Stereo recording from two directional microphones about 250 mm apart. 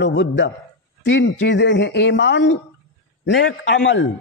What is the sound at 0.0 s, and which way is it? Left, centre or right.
A man's voice, left.